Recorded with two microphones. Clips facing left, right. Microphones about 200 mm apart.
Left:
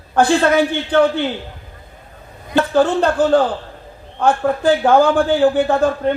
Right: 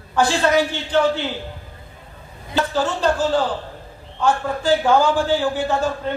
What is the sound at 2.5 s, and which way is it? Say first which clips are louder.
A man's voice: left 7 dB; 55° left (ahead or behind).